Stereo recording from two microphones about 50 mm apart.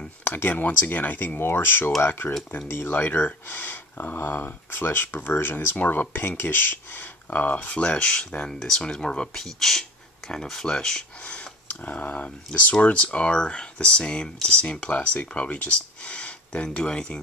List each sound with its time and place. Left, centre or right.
0.2 s speech: left; by 8.5 s centre
8.5 s speech: centre
8.9 s speech: centre
9.4 s speech: centre
11.2 s speech: left